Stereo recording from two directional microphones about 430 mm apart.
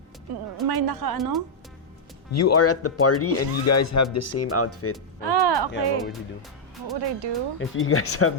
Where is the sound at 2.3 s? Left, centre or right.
Left.